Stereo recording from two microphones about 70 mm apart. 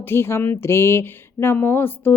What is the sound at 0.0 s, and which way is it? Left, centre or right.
A woman's voice, left.